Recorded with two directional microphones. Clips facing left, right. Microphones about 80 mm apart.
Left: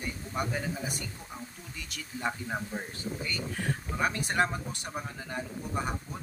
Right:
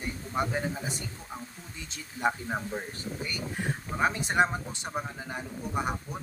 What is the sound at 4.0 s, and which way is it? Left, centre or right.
A man's voice, right.